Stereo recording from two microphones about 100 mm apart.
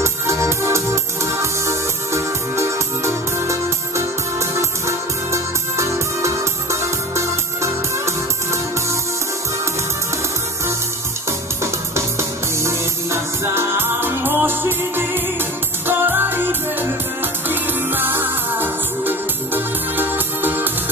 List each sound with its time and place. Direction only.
0.0 s music: 30° right (ahead or behind)
11.6 s music: 30° right (ahead or behind)